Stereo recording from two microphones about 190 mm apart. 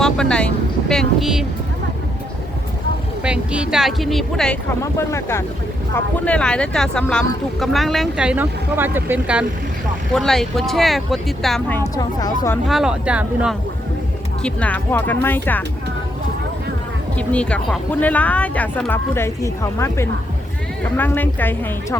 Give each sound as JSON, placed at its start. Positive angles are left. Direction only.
{"t": 0.0, "sound": "speech", "side_deg": 5}
{"t": 3.2, "sound": "speech", "side_deg": -5}
{"t": 4.8, "sound": "speech", "side_deg": 15}
{"t": 11.8, "sound": "speech", "side_deg": 20}
{"t": 12.6, "sound": "speech", "side_deg": 0}
{"t": 14.4, "sound": "speech", "side_deg": 5}
{"t": 17.2, "sound": "speech", "side_deg": 5}